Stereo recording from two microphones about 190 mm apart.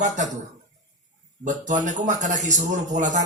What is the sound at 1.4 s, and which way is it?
Speech, 40° right (ahead or behind).